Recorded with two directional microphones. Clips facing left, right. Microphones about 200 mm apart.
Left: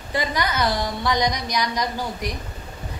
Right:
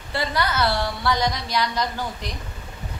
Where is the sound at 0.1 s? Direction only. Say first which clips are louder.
Even; 15° left (ahead or behind).